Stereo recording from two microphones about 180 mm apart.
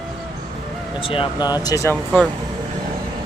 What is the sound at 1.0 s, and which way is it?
Speech, 30° left (ahead or behind).